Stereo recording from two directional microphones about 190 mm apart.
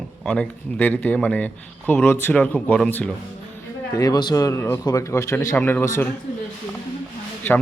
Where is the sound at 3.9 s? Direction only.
20° left (ahead or behind).